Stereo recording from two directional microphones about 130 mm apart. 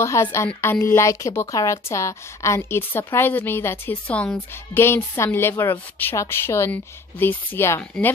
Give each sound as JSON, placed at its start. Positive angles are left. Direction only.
{"t": 0.0, "sound": "a woman's voice", "side_deg": 20}